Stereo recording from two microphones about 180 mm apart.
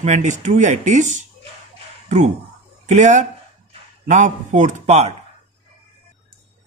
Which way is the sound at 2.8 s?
40° right (ahead or behind).